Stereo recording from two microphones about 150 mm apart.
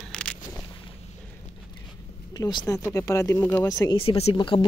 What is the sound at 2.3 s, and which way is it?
Speech, 25° left (ahead or behind).